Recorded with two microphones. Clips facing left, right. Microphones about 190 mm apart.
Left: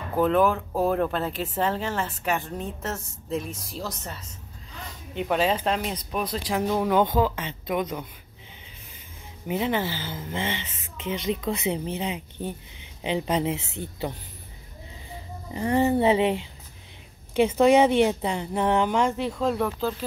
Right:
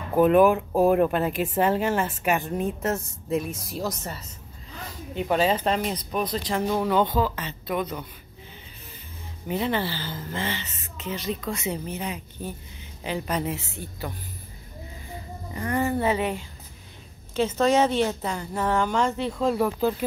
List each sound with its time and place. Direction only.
0.1 s speech: 15° right (ahead or behind); by 8.1 s 15° left (ahead or behind)
9.5 s speech: 10° left (ahead or behind)
15.5 s speech: 25° left (ahead or behind); by 19.7 s centre (ahead or behind)